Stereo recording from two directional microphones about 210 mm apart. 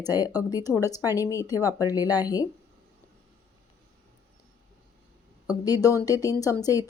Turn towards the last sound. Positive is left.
turn(degrees=15)  # may be behind; listen again after turning